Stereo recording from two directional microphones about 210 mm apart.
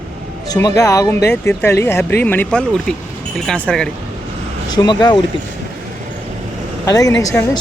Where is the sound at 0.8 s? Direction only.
15° left (ahead or behind).